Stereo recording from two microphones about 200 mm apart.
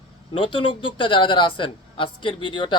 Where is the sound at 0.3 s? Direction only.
25° left (ahead or behind).